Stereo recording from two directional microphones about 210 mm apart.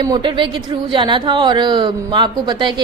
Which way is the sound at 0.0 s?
20° right (ahead or behind).